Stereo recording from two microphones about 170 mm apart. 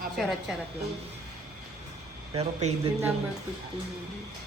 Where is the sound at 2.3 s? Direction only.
40° right (ahead or behind).